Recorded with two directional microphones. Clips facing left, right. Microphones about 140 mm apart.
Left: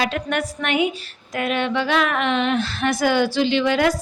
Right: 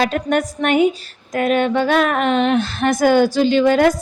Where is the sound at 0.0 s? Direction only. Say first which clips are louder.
Right 5 dB; 45° right (ahead or behind).